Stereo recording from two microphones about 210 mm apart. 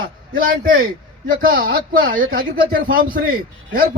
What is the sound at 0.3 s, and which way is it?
A man's voice, 45° right (ahead or behind).